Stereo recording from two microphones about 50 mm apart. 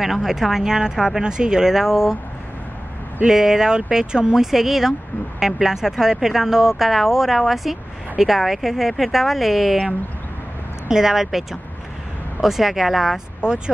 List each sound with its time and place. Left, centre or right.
0.0 s speech: centre
3.3 s speech: centre
13.4 s speech: centre